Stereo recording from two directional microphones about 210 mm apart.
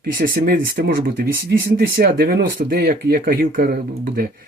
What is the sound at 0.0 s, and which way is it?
Speech, 45° right (ahead or behind).